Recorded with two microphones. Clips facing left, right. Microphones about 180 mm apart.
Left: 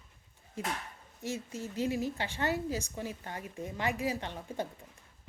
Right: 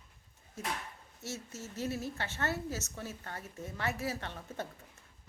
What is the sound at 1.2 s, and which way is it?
A woman's voice, 15° left (ahead or behind).